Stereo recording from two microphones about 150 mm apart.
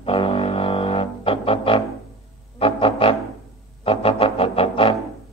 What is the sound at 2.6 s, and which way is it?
Music, 35° left (ahead or behind).